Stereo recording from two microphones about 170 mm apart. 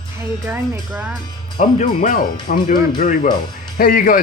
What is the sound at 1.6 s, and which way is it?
Speech, 50° left (ahead or behind).